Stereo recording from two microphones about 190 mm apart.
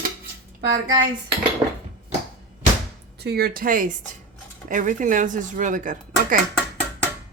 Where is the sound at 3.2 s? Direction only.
55° right (ahead or behind).